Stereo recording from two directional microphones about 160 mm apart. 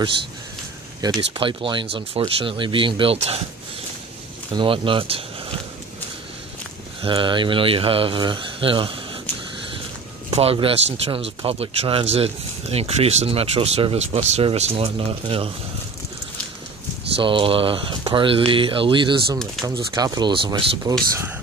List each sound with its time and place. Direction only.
1.0 s speech: 30° right (ahead or behind)
4.6 s speech: 35° right (ahead or behind)
7.0 s speech: 30° right (ahead or behind)
10.3 s speech: 35° right (ahead or behind)
17.1 s speech: 35° right (ahead or behind)